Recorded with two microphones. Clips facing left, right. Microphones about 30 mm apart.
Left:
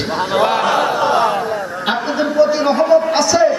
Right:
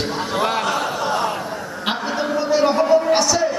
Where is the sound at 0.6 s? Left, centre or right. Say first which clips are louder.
Left 6 dB; left.